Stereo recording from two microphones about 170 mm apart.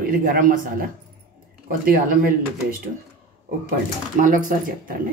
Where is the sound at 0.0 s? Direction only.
55° right (ahead or behind).